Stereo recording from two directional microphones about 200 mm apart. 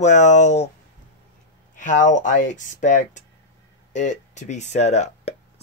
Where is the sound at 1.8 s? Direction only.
40° left (ahead or behind).